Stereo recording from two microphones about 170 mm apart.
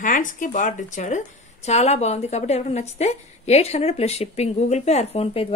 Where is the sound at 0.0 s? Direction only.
50° left (ahead or behind).